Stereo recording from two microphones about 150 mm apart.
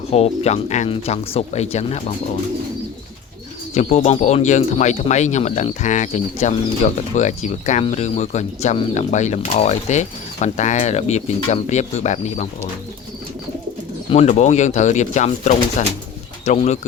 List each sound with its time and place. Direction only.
0.1 s speech: 45° left (ahead or behind)
3.8 s speech: 50° left (ahead or behind)
14.1 s speech: 50° left (ahead or behind)